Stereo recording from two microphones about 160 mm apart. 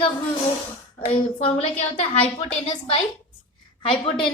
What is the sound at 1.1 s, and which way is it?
Speech, 45° left (ahead or behind).